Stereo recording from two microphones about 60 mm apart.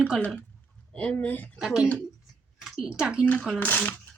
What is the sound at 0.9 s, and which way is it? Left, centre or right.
Speech, centre.